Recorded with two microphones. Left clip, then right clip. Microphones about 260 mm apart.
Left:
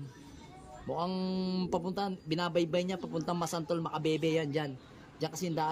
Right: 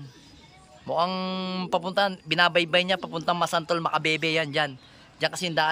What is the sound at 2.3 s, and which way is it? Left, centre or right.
Speech, centre.